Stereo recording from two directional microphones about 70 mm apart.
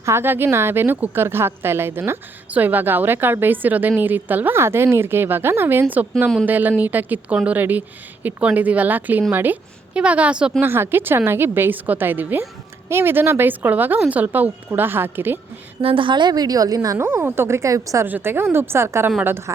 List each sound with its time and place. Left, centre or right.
0.0 s a woman's voice: right
4.5 s a woman's voice: right
9.9 s a woman's voice: centre
10.6 s a woman's voice: right
15.8 s a woman's voice: right
16.1 s a woman's voice: right
17.0 s a woman's voice: right
18.0 s a woman's voice: right